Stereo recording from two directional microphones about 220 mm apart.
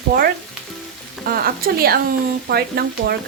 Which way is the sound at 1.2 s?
40° right (ahead or behind).